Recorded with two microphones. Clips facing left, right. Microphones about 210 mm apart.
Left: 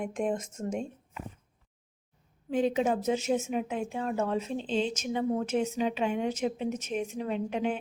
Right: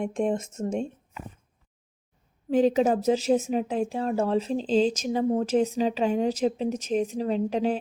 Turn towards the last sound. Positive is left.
turn(degrees=-35)  # may be behind; listen again after turning